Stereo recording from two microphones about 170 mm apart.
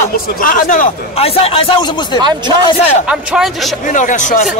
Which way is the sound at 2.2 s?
25° right (ahead or behind).